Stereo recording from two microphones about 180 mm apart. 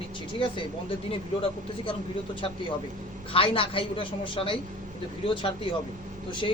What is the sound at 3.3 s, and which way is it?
A woman's voice, 30° left (ahead or behind).